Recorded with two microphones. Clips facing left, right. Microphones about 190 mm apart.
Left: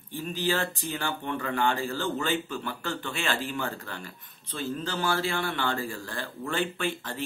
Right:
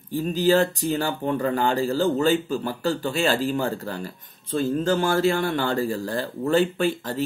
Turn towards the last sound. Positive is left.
turn(degrees=-40)  # may be behind; listen again after turning